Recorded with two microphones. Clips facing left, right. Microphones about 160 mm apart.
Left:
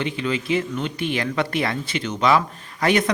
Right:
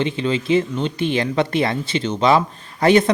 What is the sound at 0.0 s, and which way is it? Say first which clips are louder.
Speech: right 4 dB; 25° right (ahead or behind).